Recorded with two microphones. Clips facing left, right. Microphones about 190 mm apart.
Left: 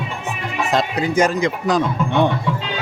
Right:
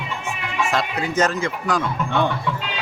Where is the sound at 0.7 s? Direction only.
20° left (ahead or behind).